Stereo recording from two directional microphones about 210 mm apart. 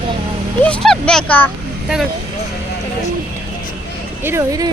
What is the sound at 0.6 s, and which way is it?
Speech, 5° left (ahead or behind).